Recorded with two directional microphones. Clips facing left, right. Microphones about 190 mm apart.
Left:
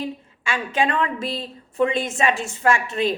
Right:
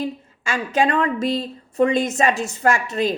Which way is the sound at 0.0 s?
40° right (ahead or behind).